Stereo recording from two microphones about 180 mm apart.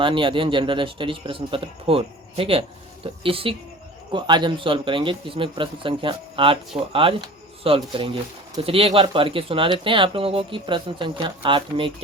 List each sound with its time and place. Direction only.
0.0 s speech: 30° right (ahead or behind)